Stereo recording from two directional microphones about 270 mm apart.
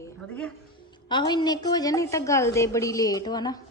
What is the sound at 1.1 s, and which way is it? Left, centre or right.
A woman's voice, centre.